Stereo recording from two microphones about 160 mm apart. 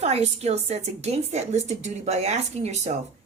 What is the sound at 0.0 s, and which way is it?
A woman's voice, 45° right (ahead or behind).